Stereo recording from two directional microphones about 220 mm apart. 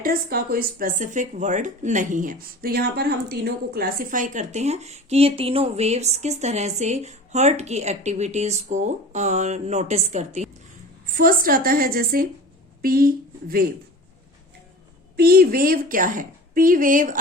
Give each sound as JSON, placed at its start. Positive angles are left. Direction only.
{"t": 0.0, "sound": "speech", "side_deg": -40}
{"t": 15.1, "sound": "speech", "side_deg": -45}